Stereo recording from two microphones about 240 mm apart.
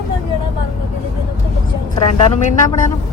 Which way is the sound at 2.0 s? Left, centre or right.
Left.